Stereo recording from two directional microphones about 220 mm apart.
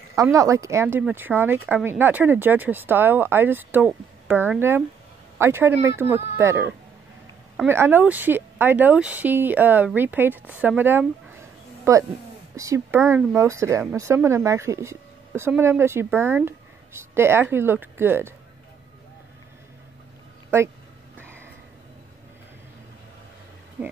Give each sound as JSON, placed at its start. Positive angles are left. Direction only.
{"t": 0.1, "sound": "speech", "side_deg": -15}
{"t": 20.5, "sound": "speech", "side_deg": -10}
{"t": 21.2, "sound": "a sound", "side_deg": -10}
{"t": 23.8, "sound": "speech", "side_deg": -5}